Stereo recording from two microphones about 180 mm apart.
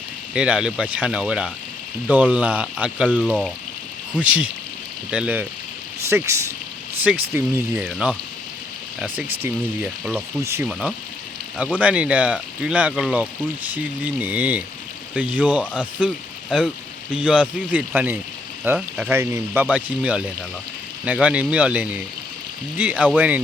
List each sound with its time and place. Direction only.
0.3 s speech: 5° right (ahead or behind)
3.2 s speech: 5° left (ahead or behind)
4.2 s speech: 5° right (ahead or behind)